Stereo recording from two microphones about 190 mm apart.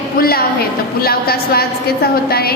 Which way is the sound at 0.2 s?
50° left (ahead or behind).